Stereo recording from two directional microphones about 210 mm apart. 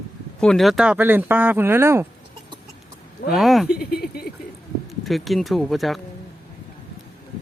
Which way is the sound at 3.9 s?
50° left (ahead or behind).